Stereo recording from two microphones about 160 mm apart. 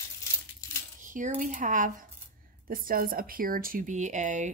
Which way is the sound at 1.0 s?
55° right (ahead or behind).